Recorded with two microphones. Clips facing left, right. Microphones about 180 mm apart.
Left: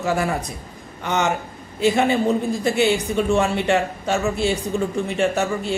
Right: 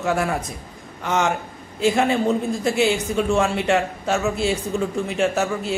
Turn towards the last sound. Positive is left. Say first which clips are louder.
# even
turn(degrees=0)  # may be behind; listen again after turning